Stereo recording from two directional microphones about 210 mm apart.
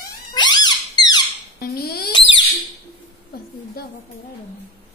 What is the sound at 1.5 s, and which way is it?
Rodents, 50° left (ahead or behind).